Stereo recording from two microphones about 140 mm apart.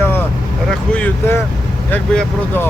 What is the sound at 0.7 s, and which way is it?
Speech, 10° left (ahead or behind).